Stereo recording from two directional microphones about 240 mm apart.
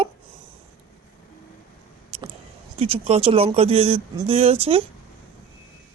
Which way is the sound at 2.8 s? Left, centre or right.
Right.